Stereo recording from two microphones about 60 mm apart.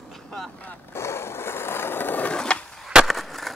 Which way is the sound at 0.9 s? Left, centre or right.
Left.